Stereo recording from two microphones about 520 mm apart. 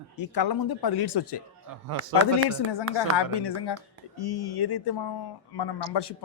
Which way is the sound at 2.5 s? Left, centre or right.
Left.